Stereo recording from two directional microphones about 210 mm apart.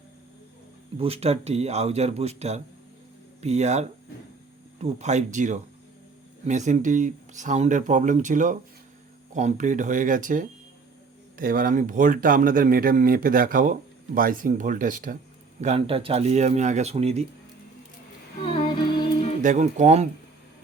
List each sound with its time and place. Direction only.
0.9 s speech: 30° right (ahead or behind)
15.6 s speech: 30° right (ahead or behind)
18.4 s music: 25° left (ahead or behind)
19.4 s speech: 35° right (ahead or behind)